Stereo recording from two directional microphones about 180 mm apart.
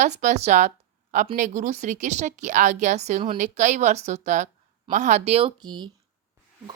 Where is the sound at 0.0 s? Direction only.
40° right (ahead or behind).